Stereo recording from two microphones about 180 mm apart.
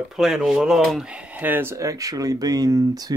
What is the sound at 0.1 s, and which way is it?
Speech, centre (ahead or behind).